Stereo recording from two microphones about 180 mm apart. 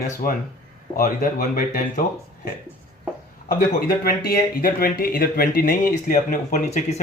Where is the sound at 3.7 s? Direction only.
55° left (ahead or behind).